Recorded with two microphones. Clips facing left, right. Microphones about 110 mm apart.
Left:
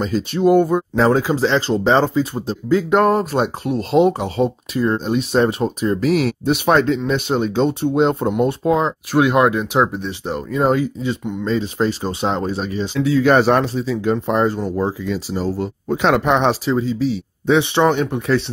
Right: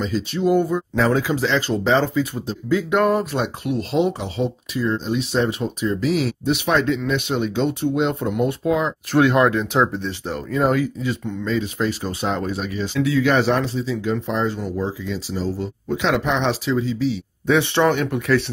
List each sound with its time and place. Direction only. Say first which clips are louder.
0.0 s speech: left 4 dB; 45° left (ahead or behind)
0.9 s speech: left 3 dB; 35° left (ahead or behind)
9.1 s speech: left 1 dB; 15° left (ahead or behind)
11.4 s speech: left 3 dB; 35° left (ahead or behind)
13.3 s speech: left 4 dB; 50° left (ahead or behind)
17.5 s speech: left 2 dB; 20° left (ahead or behind)